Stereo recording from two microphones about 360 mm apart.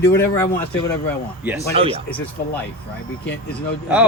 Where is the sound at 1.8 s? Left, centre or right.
Centre.